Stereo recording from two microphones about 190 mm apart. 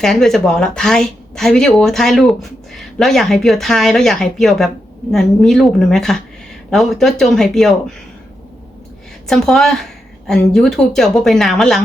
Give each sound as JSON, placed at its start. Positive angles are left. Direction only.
{"t": 0.0, "sound": "speech", "side_deg": 0}
{"t": 9.2, "sound": "speech", "side_deg": 0}